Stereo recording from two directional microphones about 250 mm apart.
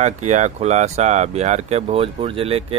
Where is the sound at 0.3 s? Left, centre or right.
Right.